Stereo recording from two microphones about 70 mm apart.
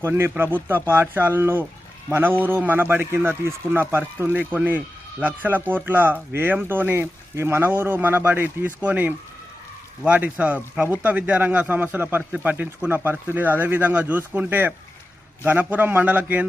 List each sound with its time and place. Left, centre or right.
0.0 s speech: right